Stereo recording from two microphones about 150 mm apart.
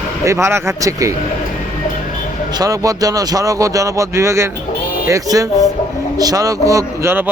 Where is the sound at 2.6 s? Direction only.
25° right (ahead or behind).